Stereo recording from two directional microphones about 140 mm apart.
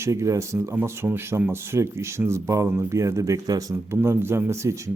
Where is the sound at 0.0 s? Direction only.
20° right (ahead or behind).